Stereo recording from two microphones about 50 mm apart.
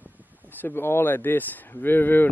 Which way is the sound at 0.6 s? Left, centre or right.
Left.